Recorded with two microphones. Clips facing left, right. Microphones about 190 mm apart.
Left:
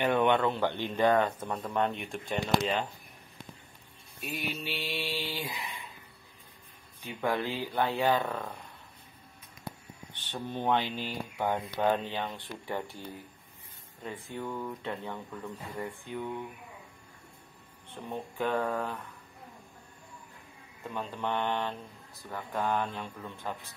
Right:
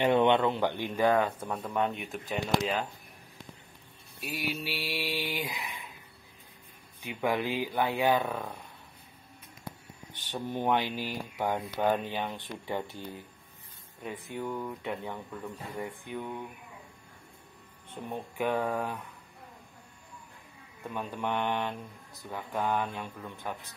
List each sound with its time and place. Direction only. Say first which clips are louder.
0.0 s speech: right 2 dB; 20° right (ahead or behind); by 2.9 s 5° right (ahead or behind)
4.2 s speech: right 1 dB; 5° right (ahead or behind)
7.0 s speech: right 1 dB; 15° right (ahead or behind)
10.3 s speech: right 1 dB; 10° right (ahead or behind)
14.0 s speech: right 2 dB; 15° right (ahead or behind)
18.1 s speech: right 1 dB; 15° right (ahead or behind)
20.9 s speech: right 1 dB; 10° right (ahead or behind)